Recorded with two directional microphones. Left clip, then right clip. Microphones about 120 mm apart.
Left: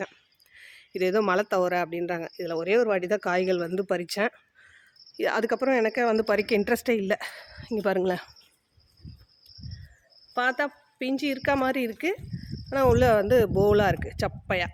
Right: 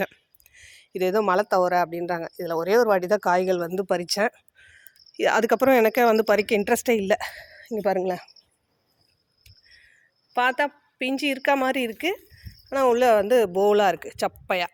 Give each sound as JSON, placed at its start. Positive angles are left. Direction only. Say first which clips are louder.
{"t": 0.5, "sound": "speech", "louder": "right 1 dB", "side_deg": -5}
{"t": 5.5, "sound": "speech", "louder": "right 6 dB", "side_deg": -40}
{"t": 6.1, "sound": "a woman's voice", "louder": "right 3 dB", "side_deg": -15}
{"t": 10.3, "sound": "a woman's voice", "louder": "right 4 dB", "side_deg": -20}
{"t": 12.6, "sound": "speech", "louder": "right 2 dB", "side_deg": -5}